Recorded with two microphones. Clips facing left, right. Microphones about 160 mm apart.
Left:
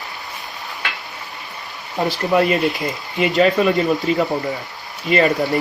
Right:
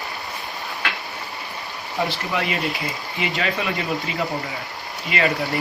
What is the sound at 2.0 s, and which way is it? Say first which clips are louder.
Speech: left 9 dB; 45° left (ahead or behind).